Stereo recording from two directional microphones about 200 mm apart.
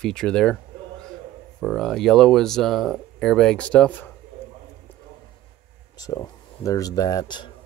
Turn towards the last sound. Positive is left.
turn(degrees=20)  # may be behind; listen again after turning